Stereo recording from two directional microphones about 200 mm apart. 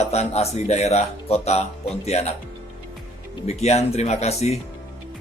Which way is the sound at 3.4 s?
35° left (ahead or behind).